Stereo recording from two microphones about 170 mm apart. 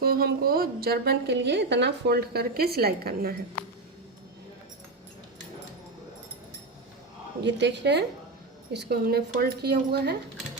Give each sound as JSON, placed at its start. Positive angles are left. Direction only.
{"t": 0.0, "sound": "a woman's voice", "side_deg": -65}
{"t": 7.4, "sound": "a woman's voice", "side_deg": -90}
{"t": 8.7, "sound": "a woman's voice", "side_deg": -75}